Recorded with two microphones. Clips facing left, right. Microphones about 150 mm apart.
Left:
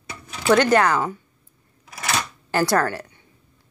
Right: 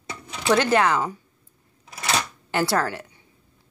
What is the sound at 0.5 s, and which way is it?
Speech, 5° right (ahead or behind).